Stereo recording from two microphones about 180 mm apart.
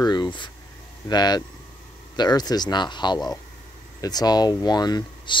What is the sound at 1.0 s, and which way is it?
Speech, 20° left (ahead or behind).